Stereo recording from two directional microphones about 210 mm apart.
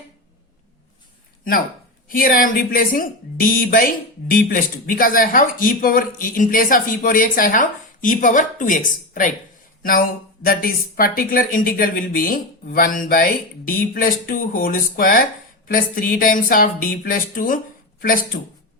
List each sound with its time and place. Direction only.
2.0 s speech: 40° left (ahead or behind)
10.4 s speech: 45° left (ahead or behind)